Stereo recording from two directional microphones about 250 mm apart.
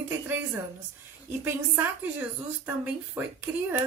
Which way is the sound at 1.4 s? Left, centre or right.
Centre.